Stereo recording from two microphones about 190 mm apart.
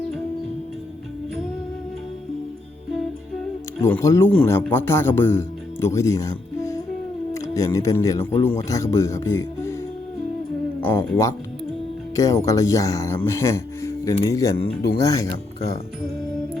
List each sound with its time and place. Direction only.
3.8 s speech: 15° left (ahead or behind)
10.9 s speech: 15° left (ahead or behind)